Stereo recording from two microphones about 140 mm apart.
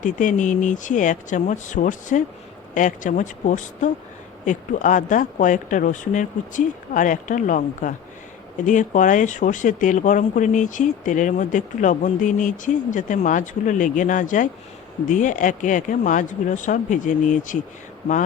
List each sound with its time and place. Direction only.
0.0 s speech: 65° left (ahead or behind)